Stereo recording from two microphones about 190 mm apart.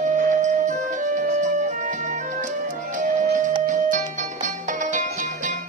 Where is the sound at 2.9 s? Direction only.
40° right (ahead or behind).